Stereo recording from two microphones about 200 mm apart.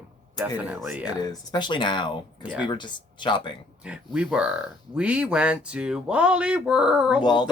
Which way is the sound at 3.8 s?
5° right (ahead or behind).